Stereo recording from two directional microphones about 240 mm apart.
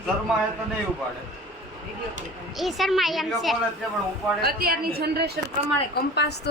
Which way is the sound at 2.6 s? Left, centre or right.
Centre.